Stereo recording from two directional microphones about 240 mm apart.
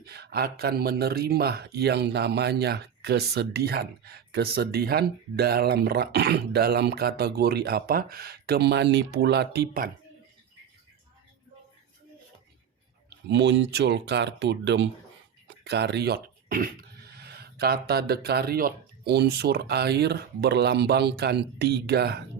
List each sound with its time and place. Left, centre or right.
0.0 s speech: right
13.1 s speech: right